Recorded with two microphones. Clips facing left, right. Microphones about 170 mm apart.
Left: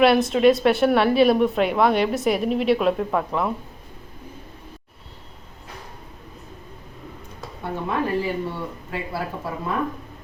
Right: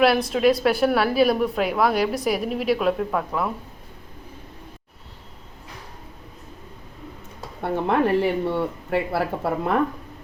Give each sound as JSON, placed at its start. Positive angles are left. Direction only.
{"t": 0.3, "sound": "a woman's voice", "side_deg": 0}
{"t": 7.6, "sound": "speech", "side_deg": -65}